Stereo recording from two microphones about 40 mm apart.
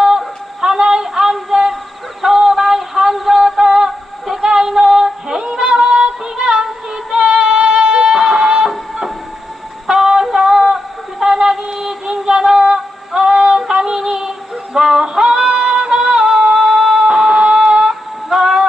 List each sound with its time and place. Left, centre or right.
0.0 s synthetic singing: centre
2.2 s music: centre
3.8 s synthetic singing: centre
4.5 s female singing: centre
7.2 s music: right
13.9 s female singing: centre
18.3 s a sound: centre